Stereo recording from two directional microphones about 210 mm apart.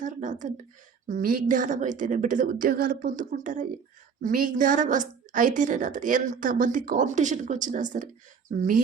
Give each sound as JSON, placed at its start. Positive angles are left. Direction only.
{"t": 0.0, "sound": "a woman's voice", "side_deg": -35}